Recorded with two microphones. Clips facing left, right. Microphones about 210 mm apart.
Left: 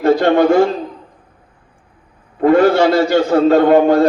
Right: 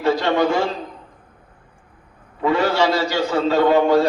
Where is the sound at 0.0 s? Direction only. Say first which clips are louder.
Left 6 dB; 55° left (ahead or behind).